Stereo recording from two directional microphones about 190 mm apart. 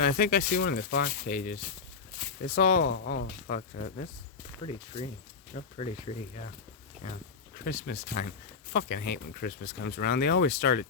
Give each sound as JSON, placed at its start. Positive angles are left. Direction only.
{"t": 0.0, "sound": "speech", "side_deg": 50}
{"t": 3.1, "sound": "speech", "side_deg": 60}
{"t": 3.5, "sound": "speech", "side_deg": 40}
{"t": 5.5, "sound": "speech", "side_deg": 35}
{"t": 7.5, "sound": "speech", "side_deg": 50}